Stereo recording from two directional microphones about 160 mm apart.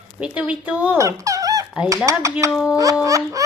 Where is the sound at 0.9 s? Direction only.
20° right (ahead or behind).